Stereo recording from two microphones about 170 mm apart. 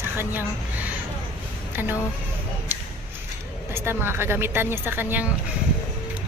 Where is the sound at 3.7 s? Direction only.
15° right (ahead or behind).